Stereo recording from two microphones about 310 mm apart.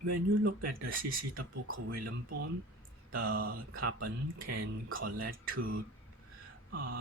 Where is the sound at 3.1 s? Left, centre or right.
Right.